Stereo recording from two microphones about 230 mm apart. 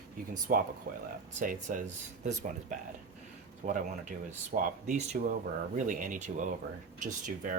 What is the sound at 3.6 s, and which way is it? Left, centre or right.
Speech, right.